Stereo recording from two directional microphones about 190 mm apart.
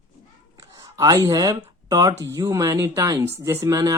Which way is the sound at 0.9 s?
20° right (ahead or behind).